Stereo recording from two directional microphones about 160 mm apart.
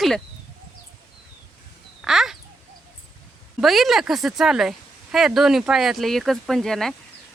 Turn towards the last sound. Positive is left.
turn(degrees=0)  # may be behind; listen again after turning